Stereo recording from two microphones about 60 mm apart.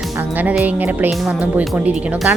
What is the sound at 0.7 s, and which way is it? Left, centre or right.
Speech, right.